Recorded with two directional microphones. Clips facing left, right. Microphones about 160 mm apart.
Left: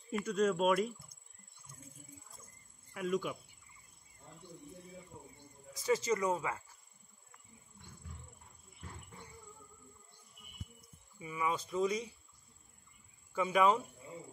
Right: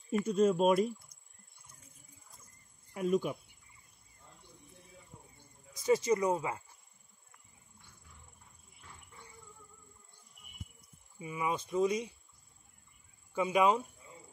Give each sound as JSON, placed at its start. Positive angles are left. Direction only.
{"t": 0.2, "sound": "speech", "side_deg": -25}
{"t": 2.9, "sound": "speech", "side_deg": -25}
{"t": 5.9, "sound": "speech", "side_deg": -20}
{"t": 11.1, "sound": "speech", "side_deg": -20}
{"t": 13.3, "sound": "speech", "side_deg": -15}